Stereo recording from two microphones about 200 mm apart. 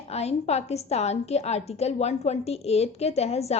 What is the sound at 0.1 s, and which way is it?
A woman's voice, 30° left (ahead or behind).